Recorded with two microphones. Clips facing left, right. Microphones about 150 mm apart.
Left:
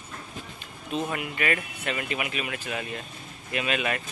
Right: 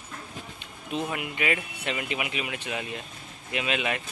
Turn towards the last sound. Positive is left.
turn(degrees=-20)  # may be behind; listen again after turning